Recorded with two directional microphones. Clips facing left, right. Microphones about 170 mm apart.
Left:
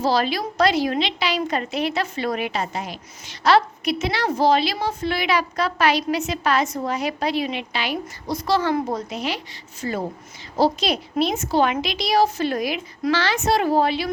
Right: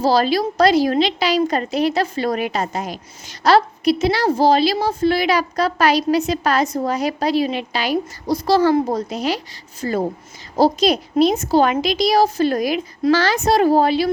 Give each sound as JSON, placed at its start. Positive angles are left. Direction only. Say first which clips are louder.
{"t": 0.0, "sound": "a woman's voice", "louder": "right 5 dB", "side_deg": -35}